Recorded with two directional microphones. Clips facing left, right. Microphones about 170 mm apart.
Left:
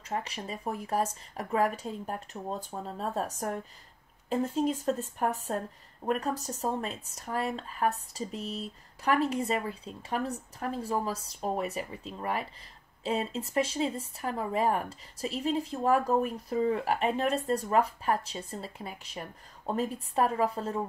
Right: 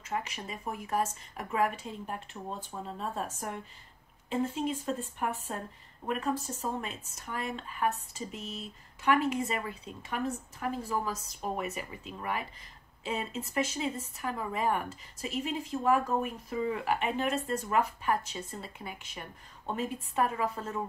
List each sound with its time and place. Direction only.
0.0 s speech: 35° left (ahead or behind)